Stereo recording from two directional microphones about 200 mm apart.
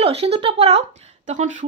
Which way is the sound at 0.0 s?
30° right (ahead or behind).